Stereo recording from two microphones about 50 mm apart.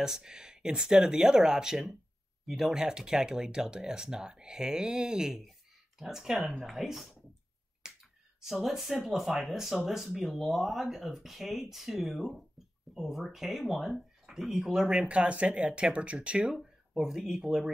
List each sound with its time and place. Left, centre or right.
0.0 s speech: centre
7.8 s finger snapping: centre
8.4 s speech: centre
14.9 s speech: right
16.4 s speech: centre